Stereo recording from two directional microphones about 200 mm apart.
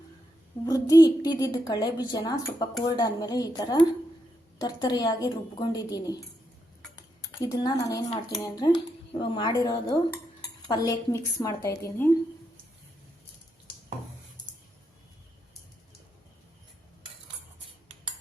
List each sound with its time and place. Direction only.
0.6 s a woman's voice: 20° left (ahead or behind)
7.3 s a woman's voice: 20° left (ahead or behind)